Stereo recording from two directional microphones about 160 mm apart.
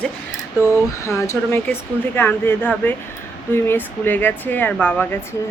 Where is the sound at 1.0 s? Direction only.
20° left (ahead or behind).